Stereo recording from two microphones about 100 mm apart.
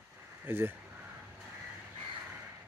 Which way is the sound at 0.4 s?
20° right (ahead or behind).